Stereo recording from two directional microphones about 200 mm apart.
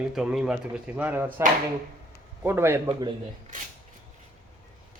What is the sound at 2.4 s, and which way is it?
Speech, 10° right (ahead or behind).